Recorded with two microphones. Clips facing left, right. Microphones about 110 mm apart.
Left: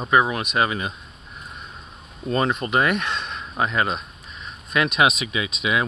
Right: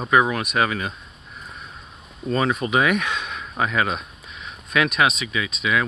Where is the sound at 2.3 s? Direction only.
5° right (ahead or behind).